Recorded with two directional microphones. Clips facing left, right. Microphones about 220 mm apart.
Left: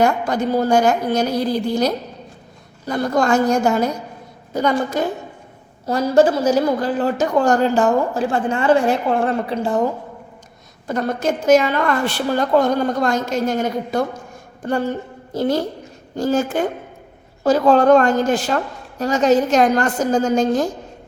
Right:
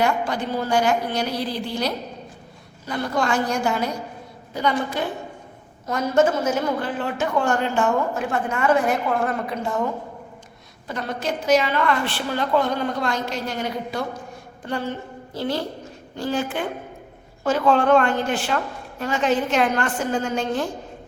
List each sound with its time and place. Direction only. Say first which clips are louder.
0.0 s a woman's voice: left 5 dB; 45° left (ahead or behind)
10.8 s a woman's voice: left 7 dB; 45° left (ahead or behind)